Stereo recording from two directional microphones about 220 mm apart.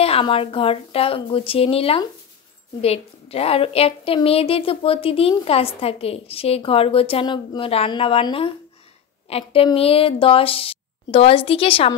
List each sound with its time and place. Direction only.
0.0 s a woman's voice: 25° left (ahead or behind)